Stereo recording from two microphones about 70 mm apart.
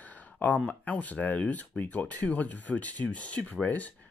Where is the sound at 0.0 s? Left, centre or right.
Left.